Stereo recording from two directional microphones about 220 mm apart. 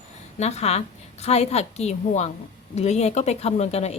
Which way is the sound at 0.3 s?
30° left (ahead or behind).